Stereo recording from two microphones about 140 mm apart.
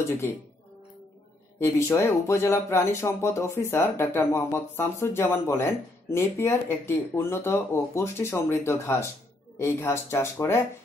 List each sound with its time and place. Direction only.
1.6 s speech: 20° left (ahead or behind)